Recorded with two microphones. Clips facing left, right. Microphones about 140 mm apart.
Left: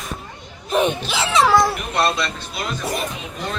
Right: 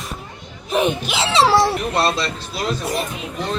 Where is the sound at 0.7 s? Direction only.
Centre (ahead or behind).